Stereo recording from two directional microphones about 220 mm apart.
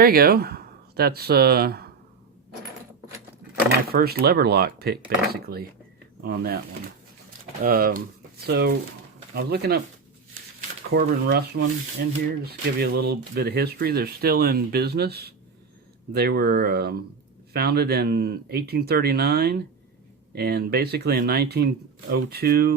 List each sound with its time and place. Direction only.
0.0 s speech: 45° right (ahead or behind)
3.8 s speech: 45° right (ahead or behind)
7.6 s speech: 40° right (ahead or behind)
10.9 s speech: 45° right (ahead or behind)